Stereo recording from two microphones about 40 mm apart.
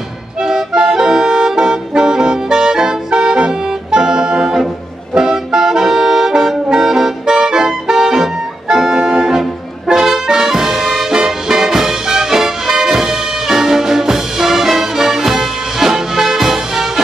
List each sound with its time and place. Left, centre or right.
0.4 s music: centre